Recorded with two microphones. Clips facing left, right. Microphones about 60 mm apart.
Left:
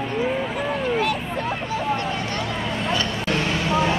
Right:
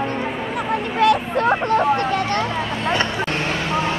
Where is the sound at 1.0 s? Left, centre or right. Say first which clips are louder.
Right 7 dB; right.